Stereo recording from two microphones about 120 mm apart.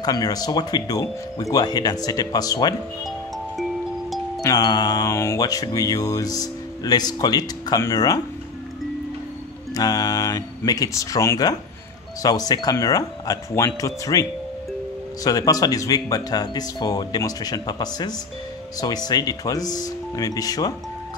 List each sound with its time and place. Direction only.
0.0 s music: 35° left (ahead or behind)
4.4 s music: 30° left (ahead or behind)
9.8 s music: 35° left (ahead or behind)
13.7 s speech: 30° left (ahead or behind)
15.2 s music: 30° left (ahead or behind)